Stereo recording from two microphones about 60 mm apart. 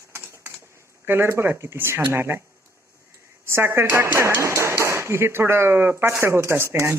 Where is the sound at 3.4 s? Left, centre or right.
Right.